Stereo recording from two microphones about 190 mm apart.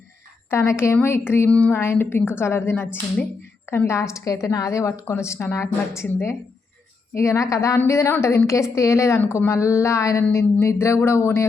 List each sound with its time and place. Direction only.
0.5 s a woman's voice: 15° left (ahead or behind)